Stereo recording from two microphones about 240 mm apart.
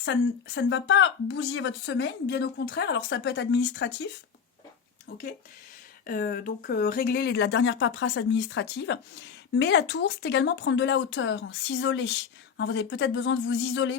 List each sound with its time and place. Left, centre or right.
0.0 s speech: left
5.0 s speech: left